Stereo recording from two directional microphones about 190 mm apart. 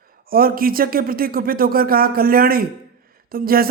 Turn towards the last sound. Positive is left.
turn(degrees=-50)  # may be behind; listen again after turning